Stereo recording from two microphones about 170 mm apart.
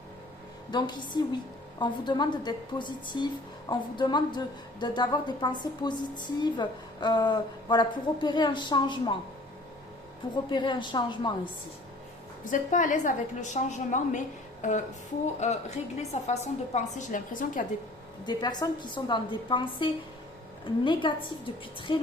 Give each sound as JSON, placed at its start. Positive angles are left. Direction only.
{"t": 0.7, "sound": "a woman's voice", "side_deg": 25}
{"t": 10.5, "sound": "a woman's voice", "side_deg": 25}
{"t": 12.5, "sound": "a woman's voice", "side_deg": 45}
{"t": 14.6, "sound": "music", "side_deg": 45}
{"t": 15.4, "sound": "a woman's voice", "side_deg": 40}
{"t": 18.3, "sound": "a woman's voice", "side_deg": 25}